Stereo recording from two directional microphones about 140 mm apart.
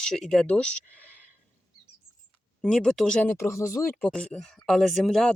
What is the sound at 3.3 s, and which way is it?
Speech, 20° left (ahead or behind).